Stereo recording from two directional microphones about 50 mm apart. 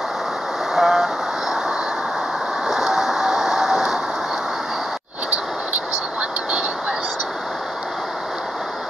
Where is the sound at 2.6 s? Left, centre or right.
Centre.